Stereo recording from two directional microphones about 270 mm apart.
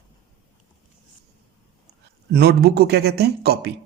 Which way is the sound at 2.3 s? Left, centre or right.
Right.